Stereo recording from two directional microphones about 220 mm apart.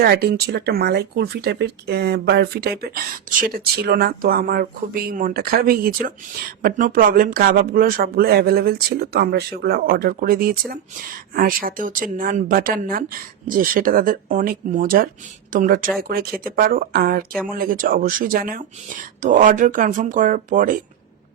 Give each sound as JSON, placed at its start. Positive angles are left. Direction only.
{"t": 0.0, "sound": "speech", "side_deg": -45}